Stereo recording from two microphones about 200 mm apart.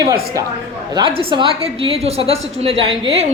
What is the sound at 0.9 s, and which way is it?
A woman's voice, 25° right (ahead or behind).